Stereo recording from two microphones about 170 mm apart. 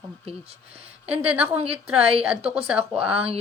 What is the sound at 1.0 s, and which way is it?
Speech, 5° right (ahead or behind).